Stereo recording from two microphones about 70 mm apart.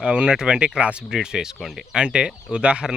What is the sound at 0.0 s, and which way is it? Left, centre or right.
Speech, centre.